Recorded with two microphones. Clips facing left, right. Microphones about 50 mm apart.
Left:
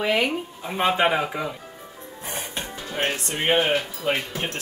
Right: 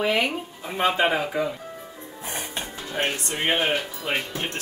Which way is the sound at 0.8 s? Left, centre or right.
Centre.